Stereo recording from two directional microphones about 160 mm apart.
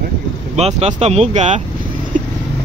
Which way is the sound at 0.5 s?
45° right (ahead or behind).